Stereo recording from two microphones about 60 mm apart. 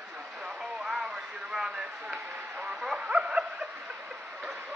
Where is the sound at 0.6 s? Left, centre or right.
Centre.